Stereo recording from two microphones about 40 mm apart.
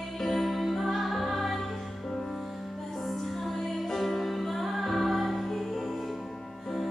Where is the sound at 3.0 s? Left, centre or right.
Centre.